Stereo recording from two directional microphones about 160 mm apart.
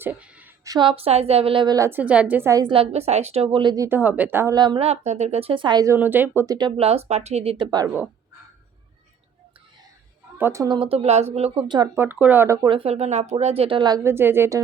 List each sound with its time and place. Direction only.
0.0 s a sound: 10° right (ahead or behind)
0.6 s a woman's voice: 25° right (ahead or behind)
3.8 s speech: 10° right (ahead or behind)
4.5 s a woman's voice: 25° right (ahead or behind)
4.9 s a woman's voice: 45° right (ahead or behind); by 7.9 s 30° right (ahead or behind)
10.3 s a woman's voice: 15° right (ahead or behind)
10.8 s a woman's voice: 35° right (ahead or behind)
11.9 s speech: 10° right (ahead or behind)
12.6 s a woman's voice: 35° right (ahead or behind); by 14.6 s 15° right (ahead or behind)